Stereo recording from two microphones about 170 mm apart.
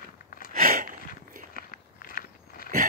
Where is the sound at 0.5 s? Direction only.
55° right (ahead or behind).